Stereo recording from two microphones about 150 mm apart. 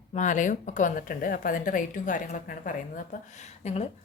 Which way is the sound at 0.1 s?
55° left (ahead or behind).